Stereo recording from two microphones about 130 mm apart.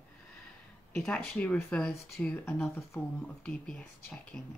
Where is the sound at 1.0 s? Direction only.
5° left (ahead or behind).